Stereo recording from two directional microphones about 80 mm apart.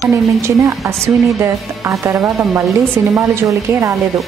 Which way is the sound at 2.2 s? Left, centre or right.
Centre.